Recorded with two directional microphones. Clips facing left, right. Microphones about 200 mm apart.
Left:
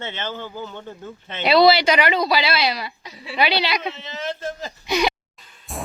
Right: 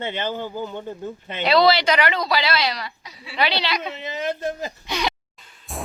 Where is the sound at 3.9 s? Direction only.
15° right (ahead or behind).